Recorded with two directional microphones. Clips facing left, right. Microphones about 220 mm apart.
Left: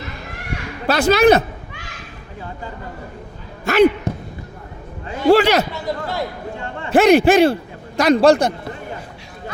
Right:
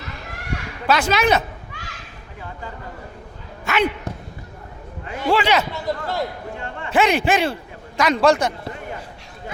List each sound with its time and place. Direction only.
0.9 s a man's voice: 35° left (ahead or behind)
3.6 s a sound: 35° left (ahead or behind)
5.3 s a man's voice: 40° left (ahead or behind)
5.7 s a man's voice: centre (ahead or behind)
6.9 s a man's voice: 40° left (ahead or behind)